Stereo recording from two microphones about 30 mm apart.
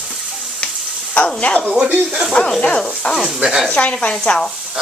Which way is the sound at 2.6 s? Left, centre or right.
Left.